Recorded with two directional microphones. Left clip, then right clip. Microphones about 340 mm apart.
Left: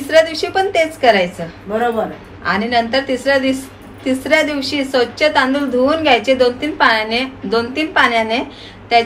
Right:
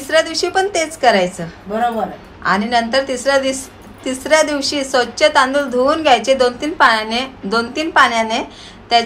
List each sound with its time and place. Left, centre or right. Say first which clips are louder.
0.1 s a woman's voice: left 2 dB; centre
2.4 s a woman's voice: even; centre